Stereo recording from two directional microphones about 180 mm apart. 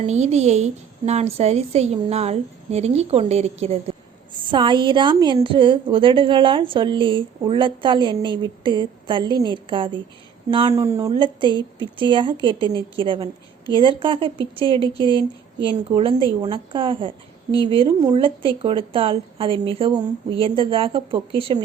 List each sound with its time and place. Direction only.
0.0 s a woman's voice: 40° right (ahead or behind)